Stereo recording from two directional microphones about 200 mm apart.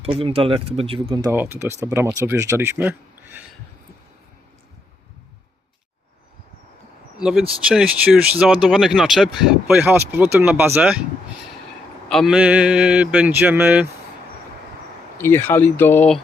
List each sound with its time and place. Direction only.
0.0 s speech: 30° right (ahead or behind)
1.3 s speech: 10° right (ahead or behind)
7.2 s speech: 5° right (ahead or behind)
12.0 s speech: centre (ahead or behind)
15.2 s speech: 10° left (ahead or behind)